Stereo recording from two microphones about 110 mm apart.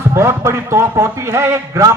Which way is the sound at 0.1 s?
25° right (ahead or behind).